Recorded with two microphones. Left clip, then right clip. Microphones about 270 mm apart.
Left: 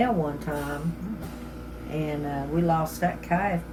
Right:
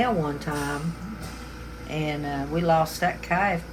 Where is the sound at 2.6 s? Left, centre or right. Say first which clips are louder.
Right 5 dB; centre.